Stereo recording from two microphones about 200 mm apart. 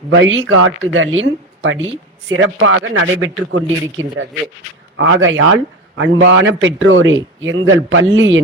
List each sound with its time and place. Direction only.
0.1 s a woman's voice: 70° right (ahead or behind)